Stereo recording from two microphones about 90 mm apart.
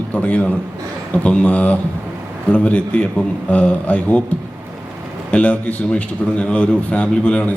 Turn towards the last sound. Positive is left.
turn(degrees=15)  # may be behind; listen again after turning